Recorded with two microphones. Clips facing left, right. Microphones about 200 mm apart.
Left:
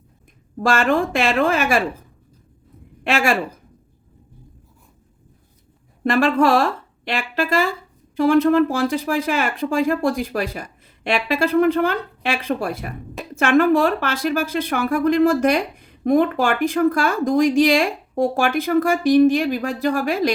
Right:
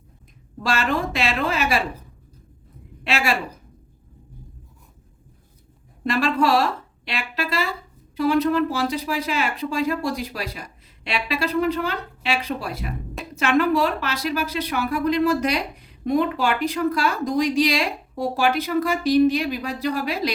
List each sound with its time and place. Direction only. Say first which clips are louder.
0.6 s speech: left 5 dB; 50° left (ahead or behind)
3.0 s speech: left 4 dB; 50° left (ahead or behind)
6.1 s speech: left 4 dB; 50° left (ahead or behind)